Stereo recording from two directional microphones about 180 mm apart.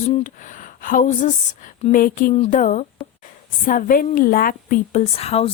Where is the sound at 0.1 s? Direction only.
45° left (ahead or behind).